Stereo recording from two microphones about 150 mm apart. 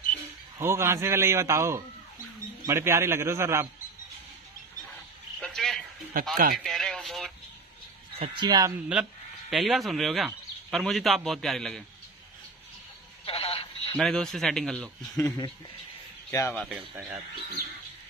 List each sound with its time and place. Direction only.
0.6 s a man's voice: 15° right (ahead or behind)
5.4 s a sound: 5° left (ahead or behind)
6.2 s speech: 70° right (ahead or behind)
6.5 s radio: centre (ahead or behind)
8.2 s a man's voice: 30° right (ahead or behind)
8.7 s a man's voice: 5° right (ahead or behind)
13.2 s telephone: 40° left (ahead or behind)
13.9 s speech: centre (ahead or behind)
15.1 s speech: 25° left (ahead or behind)